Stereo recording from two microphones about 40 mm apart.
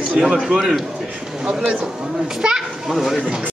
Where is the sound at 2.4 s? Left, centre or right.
Centre.